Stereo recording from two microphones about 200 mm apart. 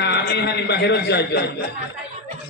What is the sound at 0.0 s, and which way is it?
A man's voice, 55° left (ahead or behind).